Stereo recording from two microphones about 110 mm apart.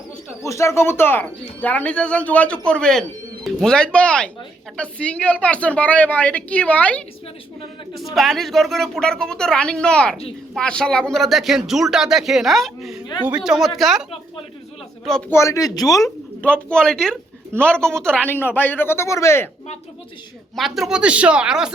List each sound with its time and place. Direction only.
0.4 s speech: 25° left (ahead or behind)
7.9 s speech: centre (ahead or behind)
15.3 s speech: 25° left (ahead or behind)
16.4 s speech: 10° left (ahead or behind); by 19.5 s 25° left (ahead or behind)
20.6 s speech: centre (ahead or behind)